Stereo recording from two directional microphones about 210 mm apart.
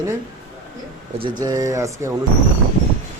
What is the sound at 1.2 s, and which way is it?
Speech, 20° right (ahead or behind).